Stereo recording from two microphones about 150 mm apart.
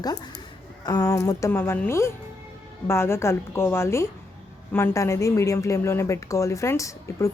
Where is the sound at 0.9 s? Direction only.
25° left (ahead or behind).